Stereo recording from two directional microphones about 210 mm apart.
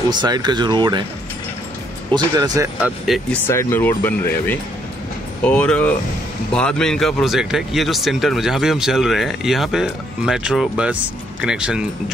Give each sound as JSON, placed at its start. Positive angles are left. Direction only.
{"t": 0.1, "sound": "speech", "side_deg": -20}
{"t": 2.1, "sound": "speech", "side_deg": -20}
{"t": 3.3, "sound": "speech", "side_deg": 10}